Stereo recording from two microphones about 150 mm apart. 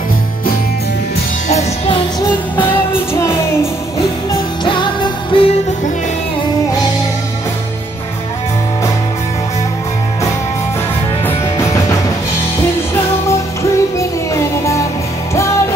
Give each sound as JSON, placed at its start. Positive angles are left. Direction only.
{"t": 2.9, "sound": "music", "side_deg": 20}
{"t": 4.6, "sound": "music", "side_deg": 35}
{"t": 11.2, "sound": "music", "side_deg": 20}
{"t": 13.3, "sound": "music", "side_deg": 20}